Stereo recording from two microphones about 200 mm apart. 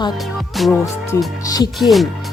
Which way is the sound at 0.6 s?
Centre (ahead or behind).